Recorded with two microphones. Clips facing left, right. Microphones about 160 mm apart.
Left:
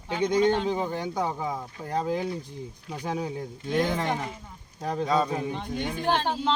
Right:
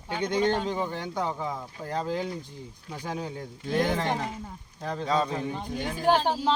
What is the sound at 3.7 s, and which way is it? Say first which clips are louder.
Speech: even; centre (ahead or behind).